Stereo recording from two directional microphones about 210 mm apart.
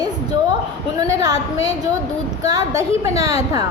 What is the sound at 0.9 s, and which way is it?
A woman's voice, 15° right (ahead or behind).